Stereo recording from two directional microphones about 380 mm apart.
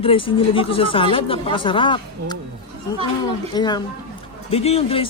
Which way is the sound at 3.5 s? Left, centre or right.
Centre.